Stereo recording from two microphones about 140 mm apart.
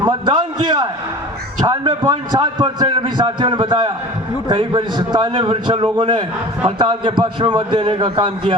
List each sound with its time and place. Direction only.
0.0 s a man's voice: 30° right (ahead or behind)